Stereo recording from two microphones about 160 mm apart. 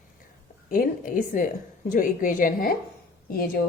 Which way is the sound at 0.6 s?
60° left (ahead or behind).